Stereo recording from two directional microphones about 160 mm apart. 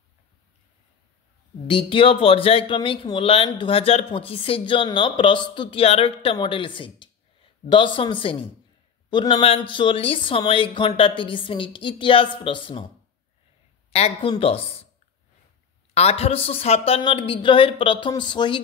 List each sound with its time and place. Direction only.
1.7 s speech: 35° left (ahead or behind)
13.9 s speech: 40° left (ahead or behind)
15.9 s speech: 40° left (ahead or behind)